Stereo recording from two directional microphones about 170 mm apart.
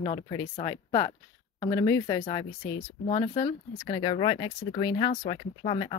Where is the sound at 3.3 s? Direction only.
25° left (ahead or behind).